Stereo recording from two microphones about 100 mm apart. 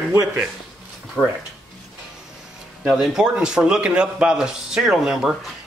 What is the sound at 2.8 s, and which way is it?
A man's voice, 5° right (ahead or behind).